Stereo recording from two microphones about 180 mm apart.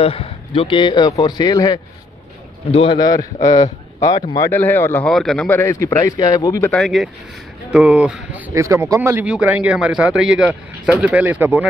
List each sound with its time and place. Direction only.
0.0 s a man's voice: 30° left (ahead or behind)
2.7 s a man's voice: 30° left (ahead or behind)
3.0 s a man's voice: 20° left (ahead or behind)
6.7 s speech: centre (ahead or behind)